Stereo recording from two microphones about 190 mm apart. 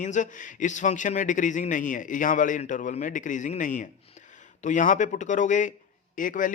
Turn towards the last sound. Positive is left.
turn(degrees=45)  # may be behind; listen again after turning